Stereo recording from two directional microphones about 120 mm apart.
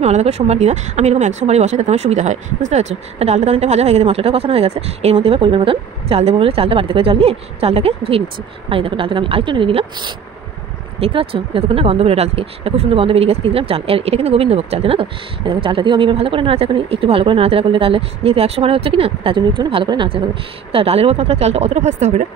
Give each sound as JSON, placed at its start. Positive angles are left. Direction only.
{"t": 0.0, "sound": "speech", "side_deg": -65}